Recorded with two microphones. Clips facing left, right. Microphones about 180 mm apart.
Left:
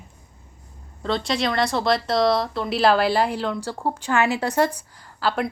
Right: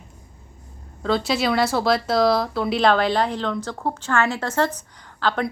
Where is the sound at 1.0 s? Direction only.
5° right (ahead or behind).